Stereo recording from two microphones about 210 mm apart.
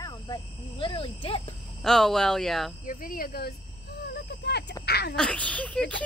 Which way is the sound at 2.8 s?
40° left (ahead or behind).